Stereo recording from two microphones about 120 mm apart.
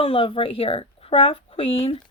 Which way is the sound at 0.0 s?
50° left (ahead or behind).